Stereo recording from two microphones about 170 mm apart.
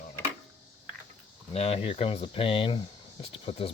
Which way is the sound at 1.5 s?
40° left (ahead or behind).